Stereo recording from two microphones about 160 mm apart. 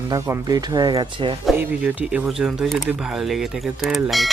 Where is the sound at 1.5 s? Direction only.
10° right (ahead or behind).